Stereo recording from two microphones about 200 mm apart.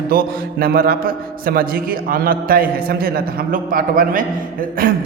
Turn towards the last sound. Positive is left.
turn(degrees=-45)  # may be behind; listen again after turning